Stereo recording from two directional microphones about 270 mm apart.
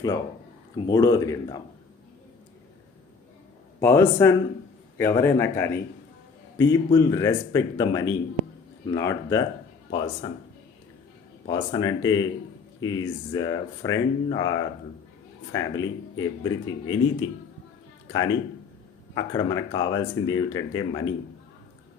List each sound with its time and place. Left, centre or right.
0.9 s speech: centre
3.8 s speech: centre
11.4 s speech: centre